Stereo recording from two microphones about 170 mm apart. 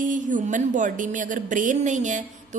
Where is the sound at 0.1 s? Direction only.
50° right (ahead or behind).